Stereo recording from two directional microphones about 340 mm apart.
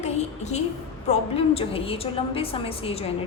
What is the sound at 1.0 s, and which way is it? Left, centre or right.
A woman's voice, centre.